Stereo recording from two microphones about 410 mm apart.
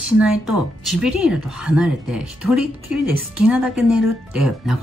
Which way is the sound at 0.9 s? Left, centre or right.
Centre.